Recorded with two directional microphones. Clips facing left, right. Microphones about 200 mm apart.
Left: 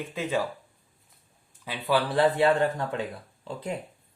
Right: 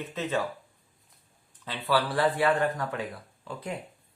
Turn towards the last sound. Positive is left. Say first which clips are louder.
# left 3 dB
turn(degrees=25)  # may be behind; listen again after turning